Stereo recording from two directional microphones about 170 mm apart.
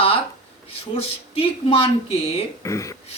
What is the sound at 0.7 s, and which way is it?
Speech, 35° left (ahead or behind).